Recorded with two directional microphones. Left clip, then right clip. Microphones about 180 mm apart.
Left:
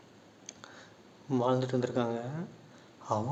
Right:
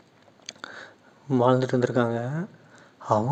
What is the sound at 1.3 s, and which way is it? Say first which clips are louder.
A man's voice: right 8 dB; 40° right (ahead or behind).